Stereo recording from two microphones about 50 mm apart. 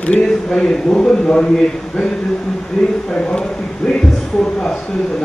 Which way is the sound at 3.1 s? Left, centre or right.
Centre.